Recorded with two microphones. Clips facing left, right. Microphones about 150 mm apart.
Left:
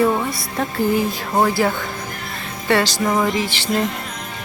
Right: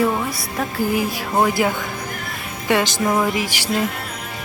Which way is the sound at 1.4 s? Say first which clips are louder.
Left 1 dB; 15° right (ahead or behind).